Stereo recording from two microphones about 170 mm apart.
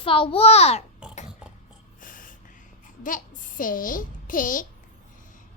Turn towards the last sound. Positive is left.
turn(degrees=55)  # may be behind; listen again after turning